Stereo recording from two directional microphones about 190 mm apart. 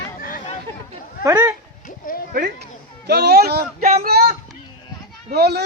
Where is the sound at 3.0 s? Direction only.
60° right (ahead or behind).